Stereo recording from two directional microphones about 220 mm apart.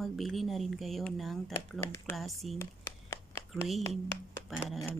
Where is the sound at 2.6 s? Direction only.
10° left (ahead or behind).